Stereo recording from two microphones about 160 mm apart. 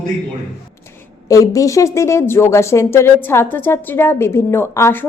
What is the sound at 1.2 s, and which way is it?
Speech, 20° left (ahead or behind).